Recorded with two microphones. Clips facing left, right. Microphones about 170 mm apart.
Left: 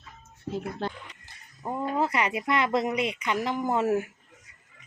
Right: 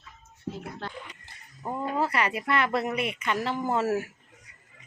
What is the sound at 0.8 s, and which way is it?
Speech, 20° left (ahead or behind).